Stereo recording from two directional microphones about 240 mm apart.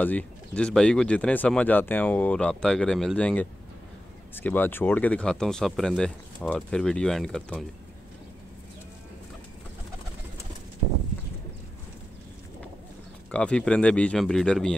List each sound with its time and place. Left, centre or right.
0.0 s speech: centre
13.3 s speech: centre